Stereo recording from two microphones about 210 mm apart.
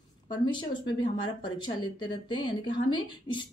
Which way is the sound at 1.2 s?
20° left (ahead or behind).